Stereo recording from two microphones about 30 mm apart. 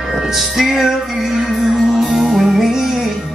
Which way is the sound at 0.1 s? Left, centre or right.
Centre.